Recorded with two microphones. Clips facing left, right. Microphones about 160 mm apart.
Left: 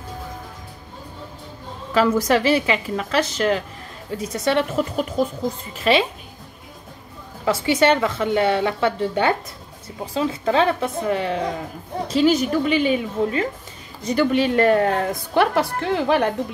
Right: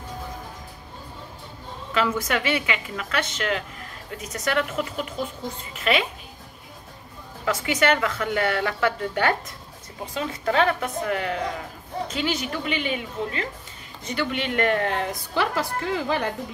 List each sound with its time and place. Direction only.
2.0 s speech: 35° left (ahead or behind)
4.9 s speech: 40° left (ahead or behind)
7.4 s a woman's voice: 30° left (ahead or behind)
12.1 s speech: 40° left (ahead or behind)
15.3 s a woman's voice: 65° left (ahead or behind)